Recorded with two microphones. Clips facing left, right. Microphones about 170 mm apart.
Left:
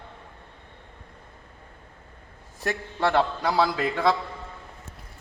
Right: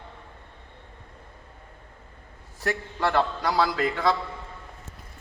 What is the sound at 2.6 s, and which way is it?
A man's voice, 20° left (ahead or behind).